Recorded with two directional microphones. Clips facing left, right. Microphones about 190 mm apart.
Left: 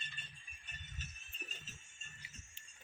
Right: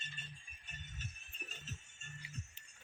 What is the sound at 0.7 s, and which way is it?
Music, 50° right (ahead or behind).